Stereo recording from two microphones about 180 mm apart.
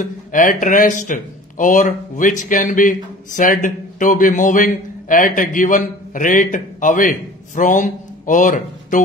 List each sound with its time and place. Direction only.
0.0 s speech: 45° left (ahead or behind)